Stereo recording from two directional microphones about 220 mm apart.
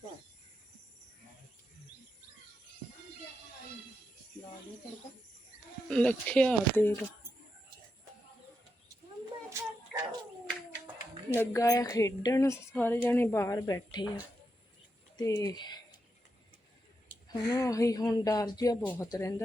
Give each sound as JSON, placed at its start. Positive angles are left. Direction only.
{"t": 5.9, "sound": "speech", "side_deg": 5}
{"t": 10.5, "sound": "a sound", "side_deg": -10}
{"t": 11.3, "sound": "speech", "side_deg": 15}
{"t": 15.1, "sound": "speech", "side_deg": 15}
{"t": 17.2, "sound": "speech", "side_deg": 15}